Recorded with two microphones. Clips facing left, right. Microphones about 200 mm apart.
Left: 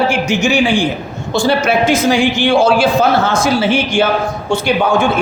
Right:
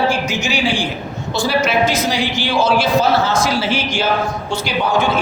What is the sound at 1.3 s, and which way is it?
A man's voice, 50° left (ahead or behind).